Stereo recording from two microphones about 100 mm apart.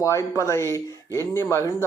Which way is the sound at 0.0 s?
30° left (ahead or behind).